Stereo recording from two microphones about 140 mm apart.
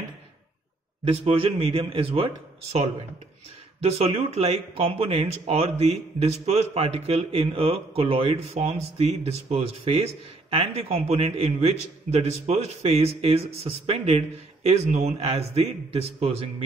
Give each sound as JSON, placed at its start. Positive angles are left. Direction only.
{"t": 1.0, "sound": "a man's voice", "side_deg": -40}